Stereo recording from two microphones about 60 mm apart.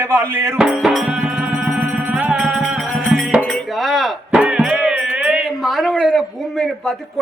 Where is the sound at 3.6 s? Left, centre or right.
Centre.